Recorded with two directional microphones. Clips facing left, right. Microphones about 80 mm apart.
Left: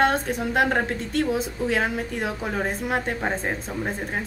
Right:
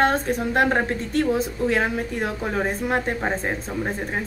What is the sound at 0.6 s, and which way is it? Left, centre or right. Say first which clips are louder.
Speech: right 2 dB; centre.